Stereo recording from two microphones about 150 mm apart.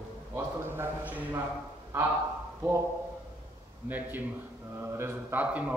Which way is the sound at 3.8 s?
10° right (ahead or behind).